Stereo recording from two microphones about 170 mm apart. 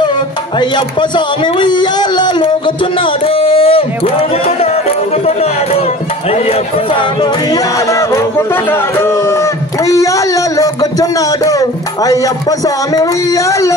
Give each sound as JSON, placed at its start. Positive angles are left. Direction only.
{"t": 0.6, "sound": "speech", "side_deg": 25}